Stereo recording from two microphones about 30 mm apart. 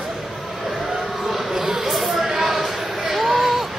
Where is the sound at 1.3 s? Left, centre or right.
Centre.